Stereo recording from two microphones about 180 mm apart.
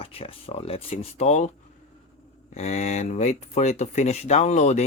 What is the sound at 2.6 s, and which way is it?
Speech, 40° left (ahead or behind).